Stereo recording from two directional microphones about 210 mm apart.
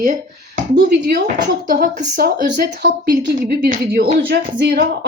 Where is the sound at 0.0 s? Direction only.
40° right (ahead or behind).